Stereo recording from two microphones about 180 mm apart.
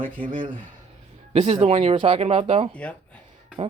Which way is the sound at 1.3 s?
35° right (ahead or behind).